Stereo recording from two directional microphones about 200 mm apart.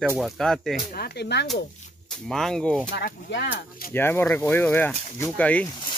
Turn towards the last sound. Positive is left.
turn(degrees=25)  # may be behind; listen again after turning